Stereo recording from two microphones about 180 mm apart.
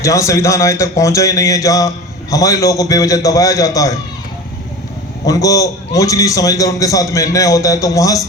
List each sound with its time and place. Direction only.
0.0 s a man's voice: 15° left (ahead or behind)
5.2 s a man's voice: 20° left (ahead or behind)